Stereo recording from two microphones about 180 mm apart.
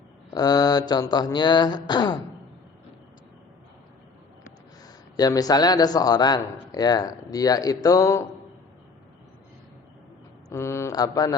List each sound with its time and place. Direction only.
0.3 s a man's voice: 20° left (ahead or behind)
5.1 s a man's voice: 20° left (ahead or behind)
10.5 s speech: 15° left (ahead or behind)